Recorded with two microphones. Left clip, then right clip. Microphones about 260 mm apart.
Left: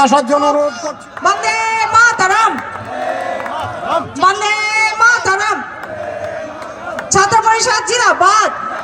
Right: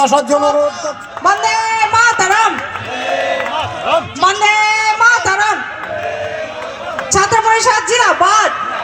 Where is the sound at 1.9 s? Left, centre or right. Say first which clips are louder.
Left 2 dB; centre.